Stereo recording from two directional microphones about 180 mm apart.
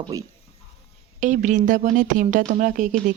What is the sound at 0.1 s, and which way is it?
Speech, 20° right (ahead or behind).